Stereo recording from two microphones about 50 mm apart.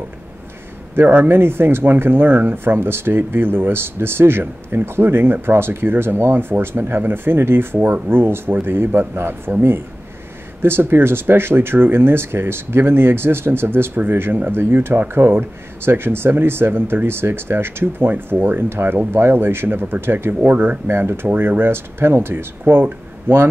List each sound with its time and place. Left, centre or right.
1.0 s speech: right
20.4 s speech: right
20.9 s speech: right